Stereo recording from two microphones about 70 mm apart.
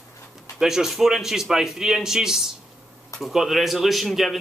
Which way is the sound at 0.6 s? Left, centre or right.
Centre.